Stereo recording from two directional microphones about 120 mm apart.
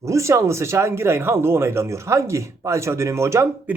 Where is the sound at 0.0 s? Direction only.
25° right (ahead or behind).